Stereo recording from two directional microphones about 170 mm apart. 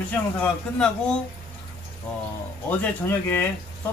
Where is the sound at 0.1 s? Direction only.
5° left (ahead or behind).